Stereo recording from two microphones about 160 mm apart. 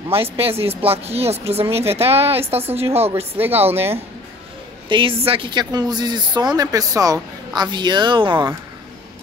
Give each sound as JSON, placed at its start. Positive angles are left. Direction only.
{"t": 0.1, "sound": "speech", "side_deg": -35}
{"t": 3.3, "sound": "speech", "side_deg": -10}
{"t": 4.8, "sound": "speech", "side_deg": -30}